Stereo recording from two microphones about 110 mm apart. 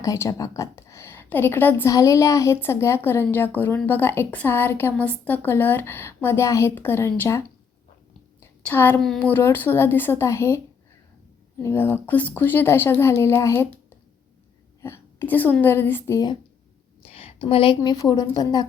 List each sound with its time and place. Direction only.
0.0 s a woman's voice: 30° left (ahead or behind)
8.6 s a woman's voice: 20° left (ahead or behind)
9.0 s a woman's voice: 5° left (ahead or behind); by 10.6 s 25° left (ahead or behind)
11.7 s a woman's voice: 20° left (ahead or behind)
14.8 s a sound: 25° left (ahead or behind)
15.6 s a woman's voice: 20° left (ahead or behind)
17.0 s a sound: 60° left (ahead or behind)
17.9 s a woman's voice: 35° left (ahead or behind)